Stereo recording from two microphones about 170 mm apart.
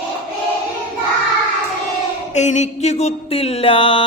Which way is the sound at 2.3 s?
45° left (ahead or behind).